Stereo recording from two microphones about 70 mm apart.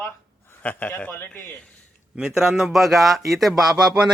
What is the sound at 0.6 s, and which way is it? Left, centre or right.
Speech, left.